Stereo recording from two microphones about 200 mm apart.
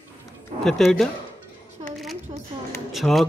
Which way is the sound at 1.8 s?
25° right (ahead or behind).